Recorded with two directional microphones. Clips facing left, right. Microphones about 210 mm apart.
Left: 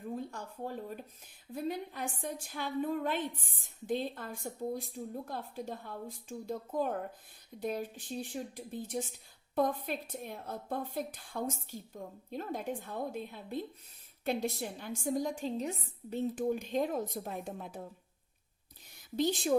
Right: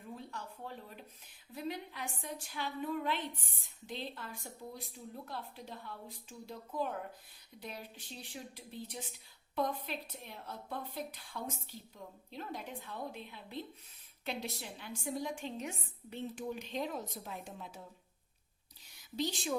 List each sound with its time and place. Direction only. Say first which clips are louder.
0.2 s a woman's voice: left 6 dB; 50° left (ahead or behind)
18.9 s speech: left 6 dB; 55° left (ahead or behind)